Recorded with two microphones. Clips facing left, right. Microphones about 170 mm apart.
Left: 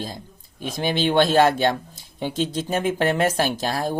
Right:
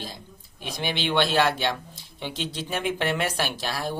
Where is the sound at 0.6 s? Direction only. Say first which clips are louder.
Left 6 dB; 45° left (ahead or behind).